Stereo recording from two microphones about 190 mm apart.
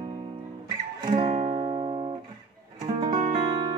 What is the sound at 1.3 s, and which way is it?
Music, 30° right (ahead or behind).